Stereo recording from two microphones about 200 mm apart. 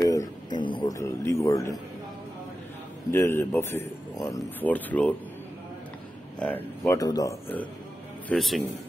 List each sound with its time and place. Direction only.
0.0 s music: 15° left (ahead or behind)
3.1 s a man's voice: 10° left (ahead or behind)
6.4 s a man's voice: 10° left (ahead or behind)
8.3 s a man's voice: centre (ahead or behind)